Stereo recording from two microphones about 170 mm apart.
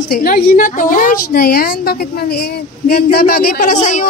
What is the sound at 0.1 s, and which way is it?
A woman's voice, 55° left (ahead or behind).